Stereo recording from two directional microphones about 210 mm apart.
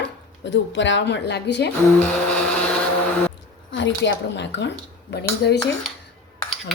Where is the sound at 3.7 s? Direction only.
60° left (ahead or behind).